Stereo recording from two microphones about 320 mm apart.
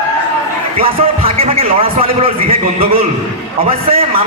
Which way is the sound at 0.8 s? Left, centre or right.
Centre.